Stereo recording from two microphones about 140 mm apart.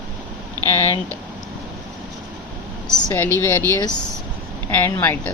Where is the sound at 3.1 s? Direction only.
15° left (ahead or behind).